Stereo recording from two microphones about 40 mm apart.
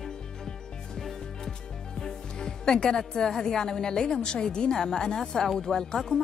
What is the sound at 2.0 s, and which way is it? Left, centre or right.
A woman's voice, centre.